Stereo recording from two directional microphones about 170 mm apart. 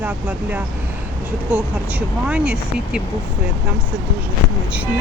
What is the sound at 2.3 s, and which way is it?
Speech, 5° right (ahead or behind).